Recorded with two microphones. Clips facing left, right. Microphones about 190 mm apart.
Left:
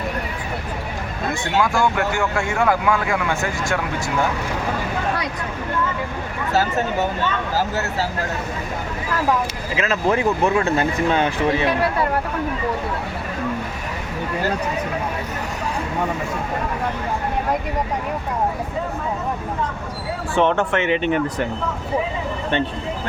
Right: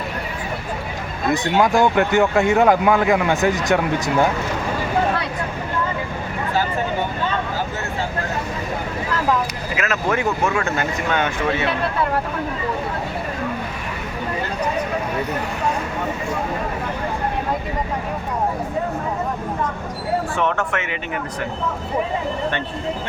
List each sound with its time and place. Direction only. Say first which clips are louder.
1.3 s speech: right 4 dB; 20° right (ahead or behind)
9.7 s speech: left 2 dB; 30° left (ahead or behind)
20.3 s speech: left 4 dB; 30° left (ahead or behind)